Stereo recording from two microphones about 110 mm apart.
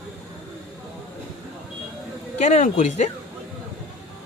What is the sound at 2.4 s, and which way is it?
Speech, 90° left.